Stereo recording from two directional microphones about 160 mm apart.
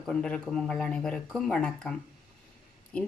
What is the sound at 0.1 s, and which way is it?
Speech, 5° left (ahead or behind).